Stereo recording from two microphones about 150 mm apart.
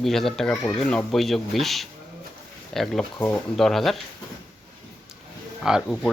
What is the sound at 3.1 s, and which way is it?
Speech, 20° left (ahead or behind).